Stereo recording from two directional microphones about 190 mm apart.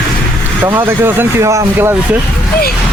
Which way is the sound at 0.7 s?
10° right (ahead or behind).